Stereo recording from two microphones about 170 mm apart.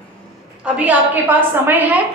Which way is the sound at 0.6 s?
10° right (ahead or behind).